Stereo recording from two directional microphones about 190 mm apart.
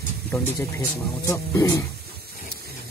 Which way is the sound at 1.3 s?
15° left (ahead or behind).